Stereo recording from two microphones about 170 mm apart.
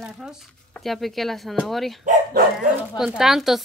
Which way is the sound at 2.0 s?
50° right (ahead or behind).